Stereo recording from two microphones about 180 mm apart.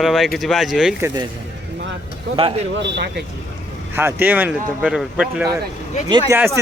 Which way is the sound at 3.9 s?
10° right (ahead or behind).